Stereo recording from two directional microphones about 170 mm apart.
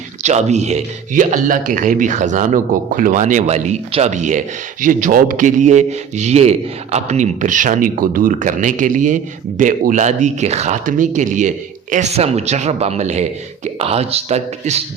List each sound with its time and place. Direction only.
0.2 s speech: 40° right (ahead or behind)